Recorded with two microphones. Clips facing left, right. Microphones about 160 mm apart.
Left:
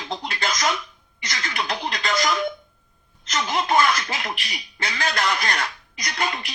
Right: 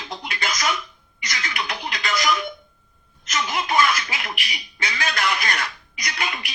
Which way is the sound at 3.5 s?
30° left (ahead or behind).